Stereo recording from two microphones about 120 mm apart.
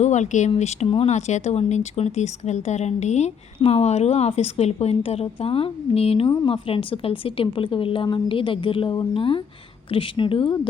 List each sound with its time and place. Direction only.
0.0 s speech: 80° left
0.6 s speech: 70° left (ahead or behind)
6.2 s a woman's voice: 40° left (ahead or behind)